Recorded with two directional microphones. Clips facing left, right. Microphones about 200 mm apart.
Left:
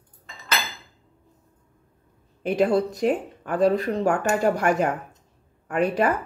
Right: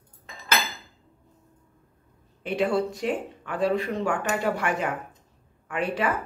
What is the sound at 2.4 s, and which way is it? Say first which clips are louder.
Speech: left 4 dB; 40° left (ahead or behind).